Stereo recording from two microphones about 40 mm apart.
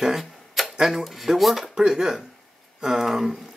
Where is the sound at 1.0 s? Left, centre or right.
Centre.